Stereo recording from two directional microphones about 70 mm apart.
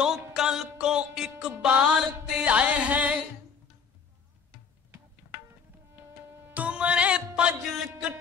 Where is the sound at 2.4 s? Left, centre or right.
Centre.